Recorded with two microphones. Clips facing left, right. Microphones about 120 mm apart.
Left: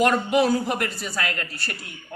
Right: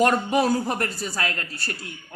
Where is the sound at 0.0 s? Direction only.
40° right (ahead or behind).